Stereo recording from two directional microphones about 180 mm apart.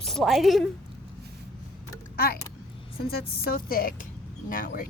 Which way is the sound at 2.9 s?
60° left (ahead or behind).